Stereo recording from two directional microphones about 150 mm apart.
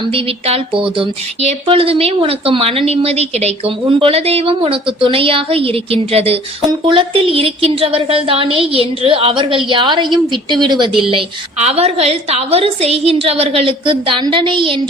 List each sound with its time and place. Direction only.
0.1 s a woman's voice: 40° right (ahead or behind)
11.1 s a woman's voice: 40° right (ahead or behind)